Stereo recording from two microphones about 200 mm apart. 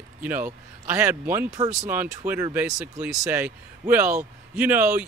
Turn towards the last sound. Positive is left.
turn(degrees=-10)  # may be behind; listen again after turning